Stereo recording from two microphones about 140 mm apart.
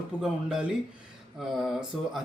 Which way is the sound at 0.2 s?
5° right (ahead or behind).